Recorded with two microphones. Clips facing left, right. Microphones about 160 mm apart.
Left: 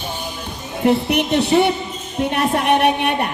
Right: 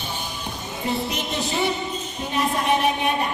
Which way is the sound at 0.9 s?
65° left (ahead or behind).